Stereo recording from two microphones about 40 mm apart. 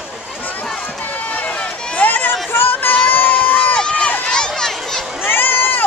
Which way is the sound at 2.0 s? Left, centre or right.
Left.